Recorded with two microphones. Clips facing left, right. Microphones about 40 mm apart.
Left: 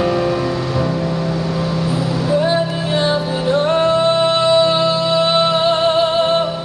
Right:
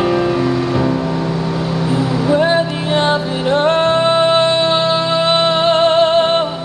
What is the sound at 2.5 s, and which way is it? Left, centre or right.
Music, right.